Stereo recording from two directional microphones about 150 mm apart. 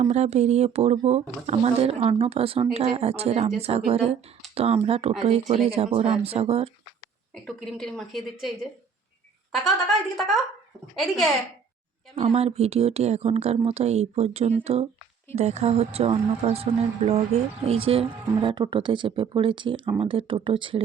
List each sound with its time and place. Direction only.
0.0 s speech: 45° right (ahead or behind)
7.4 s a woman's voice: 5° left (ahead or behind)
12.2 s speech: 45° right (ahead or behind)